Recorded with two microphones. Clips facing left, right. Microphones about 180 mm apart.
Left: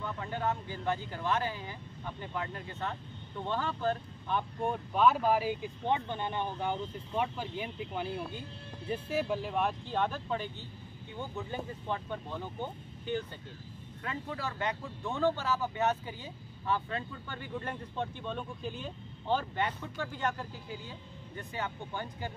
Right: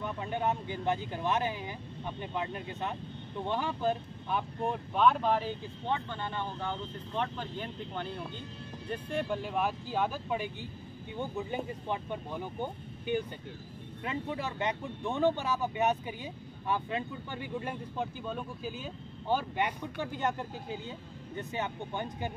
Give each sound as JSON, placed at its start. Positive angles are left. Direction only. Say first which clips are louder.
{"t": 0.0, "sound": "speech", "louder": "right 2 dB", "side_deg": -20}